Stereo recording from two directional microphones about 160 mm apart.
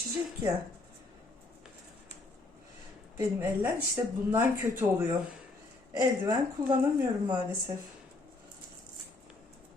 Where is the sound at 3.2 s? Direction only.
15° right (ahead or behind).